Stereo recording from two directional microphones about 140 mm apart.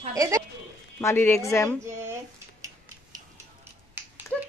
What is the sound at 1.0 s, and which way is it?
Speech, 15° left (ahead or behind).